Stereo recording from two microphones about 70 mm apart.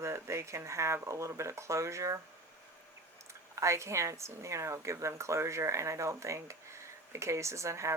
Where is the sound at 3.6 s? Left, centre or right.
Right.